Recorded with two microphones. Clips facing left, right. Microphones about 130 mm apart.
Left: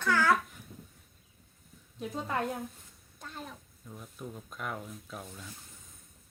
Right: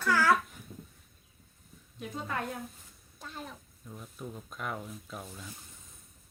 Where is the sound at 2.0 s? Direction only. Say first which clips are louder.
Left 2 dB; 25° left (ahead or behind).